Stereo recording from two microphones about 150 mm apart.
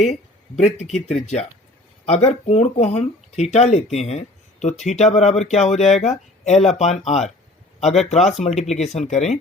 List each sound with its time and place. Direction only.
0.0 s speech: 50° left (ahead or behind)